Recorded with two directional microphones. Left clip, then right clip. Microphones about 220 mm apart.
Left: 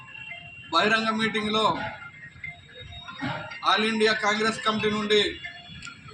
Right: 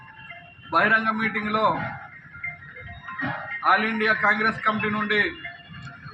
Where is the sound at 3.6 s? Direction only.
10° left (ahead or behind).